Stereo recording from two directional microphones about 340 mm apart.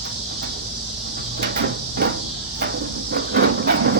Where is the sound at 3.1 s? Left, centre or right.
Right.